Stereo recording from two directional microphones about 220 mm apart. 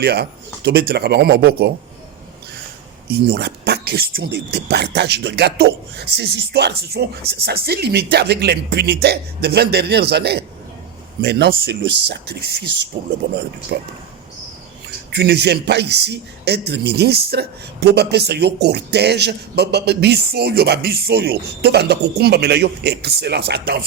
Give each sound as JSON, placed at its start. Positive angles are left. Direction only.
{"t": 0.0, "sound": "speech", "side_deg": -50}
{"t": 3.1, "sound": "speech", "side_deg": -45}